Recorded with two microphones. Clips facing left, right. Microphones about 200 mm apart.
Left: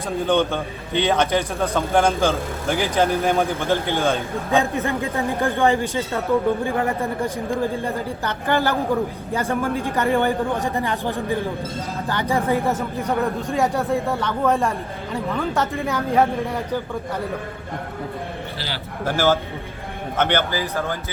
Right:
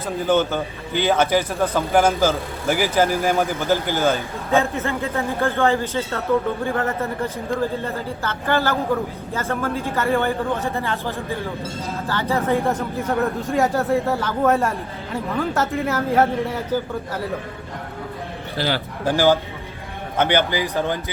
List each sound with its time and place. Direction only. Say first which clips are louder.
0.3 s a man's voice: right 2 dB; 5° right (ahead or behind)
4.5 s a woman's voice: right 1 dB; 15° left (ahead or behind)
12.6 s a man's voice: even; centre (ahead or behind)
18.5 s a man's voice: right 8 dB; 50° right (ahead or behind)
19.0 s a man's voice: right 2 dB; 15° right (ahead or behind)